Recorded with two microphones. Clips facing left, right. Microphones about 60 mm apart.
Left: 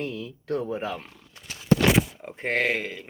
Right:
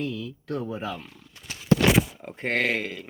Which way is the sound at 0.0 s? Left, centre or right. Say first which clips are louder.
Right 1 dB; left.